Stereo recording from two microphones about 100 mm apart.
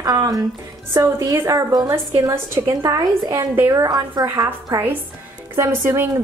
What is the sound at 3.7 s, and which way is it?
A woman's voice, 35° right (ahead or behind).